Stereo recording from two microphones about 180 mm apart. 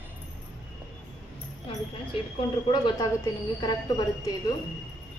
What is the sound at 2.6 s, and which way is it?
Speech, 25° left (ahead or behind).